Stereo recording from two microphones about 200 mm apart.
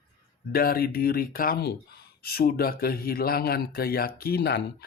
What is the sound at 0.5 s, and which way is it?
A man's voice, 50° left (ahead or behind).